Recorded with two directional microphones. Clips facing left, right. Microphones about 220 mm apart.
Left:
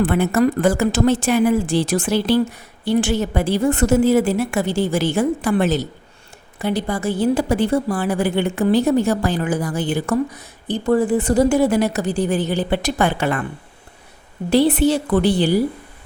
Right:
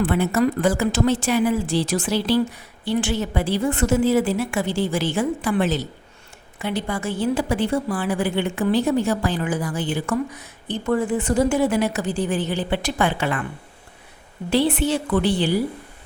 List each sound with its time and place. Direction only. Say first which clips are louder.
0.0 s a woman's voice: left 3 dB; 50° left (ahead or behind)
14.5 s a woman's voice: left 5 dB; 40° left (ahead or behind)